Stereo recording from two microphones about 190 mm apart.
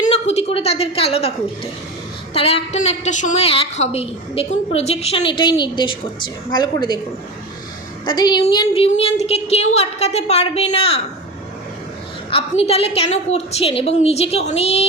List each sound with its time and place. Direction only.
0.0 s a woman's voice: 35° left (ahead or behind)
2.3 s a woman's voice: 30° left (ahead or behind)
8.0 s a woman's voice: 20° left (ahead or behind)
12.3 s a woman's voice: 30° left (ahead or behind)